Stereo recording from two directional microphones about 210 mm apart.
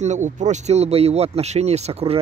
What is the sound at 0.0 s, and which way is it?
Speech, 35° right (ahead or behind).